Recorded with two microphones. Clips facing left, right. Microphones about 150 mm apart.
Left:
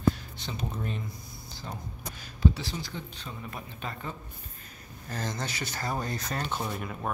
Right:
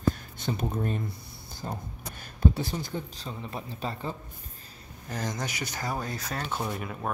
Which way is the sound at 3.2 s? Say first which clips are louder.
Right 3 dB; 30° right (ahead or behind).